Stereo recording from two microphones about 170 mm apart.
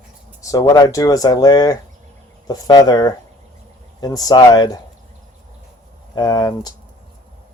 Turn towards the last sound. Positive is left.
turn(degrees=25)  # may be behind; listen again after turning